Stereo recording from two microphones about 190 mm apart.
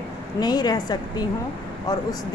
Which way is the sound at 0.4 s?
20° left (ahead or behind).